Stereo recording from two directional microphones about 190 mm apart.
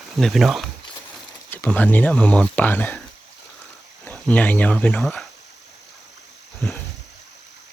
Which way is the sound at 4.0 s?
10° left (ahead or behind).